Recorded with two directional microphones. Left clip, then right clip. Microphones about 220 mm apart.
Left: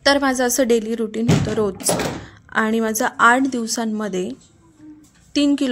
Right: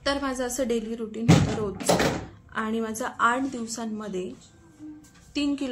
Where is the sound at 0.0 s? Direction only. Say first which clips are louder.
Left 11 dB; 40° left (ahead or behind).